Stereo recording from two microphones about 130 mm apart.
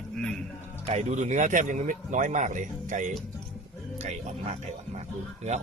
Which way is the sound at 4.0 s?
60° right (ahead or behind).